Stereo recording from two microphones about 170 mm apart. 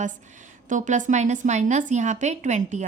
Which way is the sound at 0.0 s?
45° right (ahead or behind).